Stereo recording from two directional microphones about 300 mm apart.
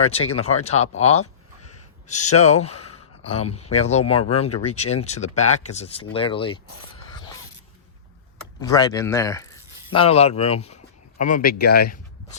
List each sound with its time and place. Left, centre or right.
0.3 s speech: left
8.6 s speech: centre; by 12.4 s left